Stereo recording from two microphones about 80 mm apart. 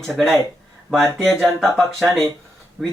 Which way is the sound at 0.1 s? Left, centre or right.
Centre.